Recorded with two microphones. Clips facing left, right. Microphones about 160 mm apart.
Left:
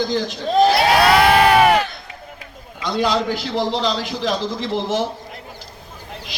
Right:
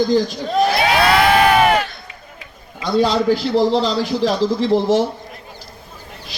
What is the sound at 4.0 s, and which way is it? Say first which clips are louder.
A man's voice: right 5 dB; 35° right (ahead or behind).